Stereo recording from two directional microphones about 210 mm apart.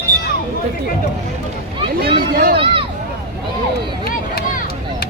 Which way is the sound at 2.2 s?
45° right (ahead or behind).